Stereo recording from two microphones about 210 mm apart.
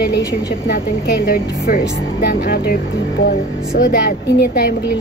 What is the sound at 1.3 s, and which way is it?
Speech, 45° left (ahead or behind).